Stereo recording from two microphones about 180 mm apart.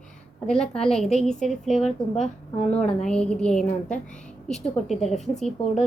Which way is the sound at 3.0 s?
5° left (ahead or behind).